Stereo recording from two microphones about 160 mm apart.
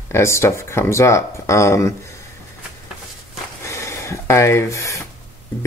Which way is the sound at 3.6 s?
15° left (ahead or behind).